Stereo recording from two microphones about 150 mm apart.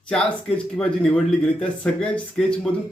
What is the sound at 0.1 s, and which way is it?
Speech, 5° left (ahead or behind).